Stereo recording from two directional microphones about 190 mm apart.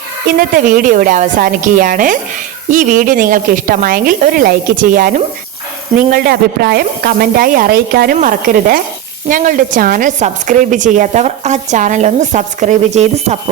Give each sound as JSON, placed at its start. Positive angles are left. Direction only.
{"t": 0.3, "sound": "a woman's voice", "side_deg": -45}